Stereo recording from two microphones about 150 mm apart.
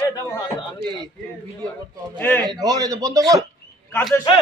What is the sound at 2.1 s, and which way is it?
Speech, 10° left (ahead or behind).